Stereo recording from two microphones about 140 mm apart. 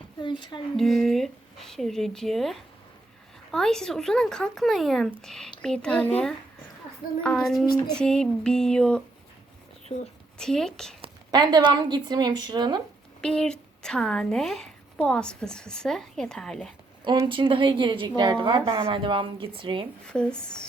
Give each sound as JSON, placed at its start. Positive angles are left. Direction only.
{"t": 0.2, "sound": "a sound", "side_deg": 35}
{"t": 0.8, "sound": "a woman's voice", "side_deg": 0}
{"t": 10.3, "sound": "a woman's voice", "side_deg": 5}
{"t": 11.3, "sound": "a woman's voice", "side_deg": -30}
{"t": 13.2, "sound": "a woman's voice", "side_deg": 5}
{"t": 17.2, "sound": "a woman's voice", "side_deg": -35}
{"t": 20.1, "sound": "speech", "side_deg": 5}